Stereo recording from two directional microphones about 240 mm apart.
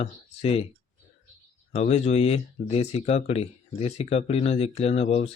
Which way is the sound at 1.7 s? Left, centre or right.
Left.